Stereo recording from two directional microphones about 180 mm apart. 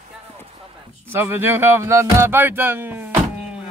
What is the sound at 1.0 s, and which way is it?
Speech, 10° right (ahead or behind).